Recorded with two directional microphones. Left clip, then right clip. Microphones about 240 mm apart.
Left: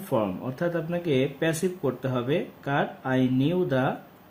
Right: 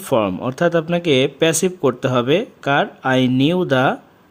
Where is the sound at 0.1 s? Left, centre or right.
Right.